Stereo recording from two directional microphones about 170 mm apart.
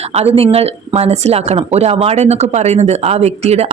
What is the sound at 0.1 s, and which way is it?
Speech, 35° right (ahead or behind).